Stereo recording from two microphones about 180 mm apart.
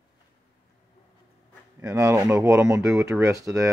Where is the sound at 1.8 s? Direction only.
15° right (ahead or behind).